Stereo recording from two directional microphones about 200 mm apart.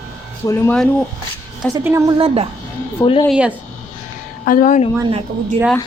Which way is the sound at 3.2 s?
5° right (ahead or behind).